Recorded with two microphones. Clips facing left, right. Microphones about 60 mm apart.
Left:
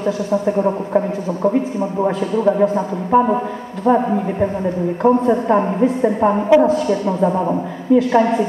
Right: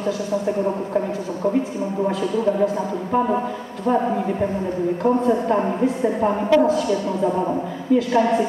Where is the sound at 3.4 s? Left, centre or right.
Left.